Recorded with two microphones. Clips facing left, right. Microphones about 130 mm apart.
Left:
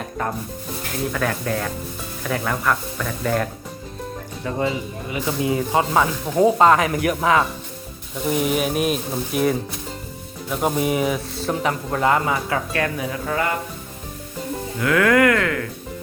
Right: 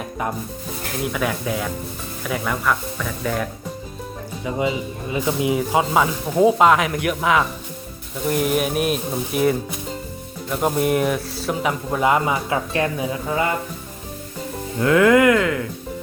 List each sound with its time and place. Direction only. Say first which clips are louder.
1.1 s speech: even; 5° right (ahead or behind)
5.2 s speech: right 1 dB; 15° right (ahead or behind)
14.8 s speech: right 3 dB; 25° right (ahead or behind)